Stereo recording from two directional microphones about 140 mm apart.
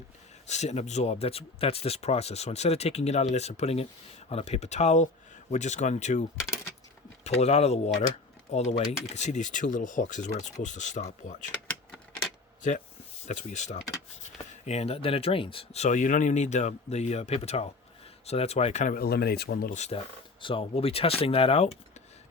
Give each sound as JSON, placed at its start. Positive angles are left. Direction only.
{"t": 0.4, "sound": "speech", "side_deg": 55}
{"t": 7.3, "sound": "speech", "side_deg": 50}
{"t": 13.2, "sound": "speech", "side_deg": 60}
{"t": 20.4, "sound": "speech", "side_deg": 40}